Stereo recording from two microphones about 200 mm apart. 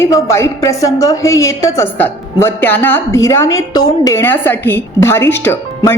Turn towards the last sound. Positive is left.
turn(degrees=10)  # may be behind; listen again after turning